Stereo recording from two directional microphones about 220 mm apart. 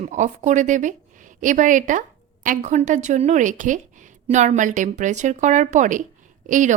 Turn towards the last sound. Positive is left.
turn(degrees=-35)  # may be behind; listen again after turning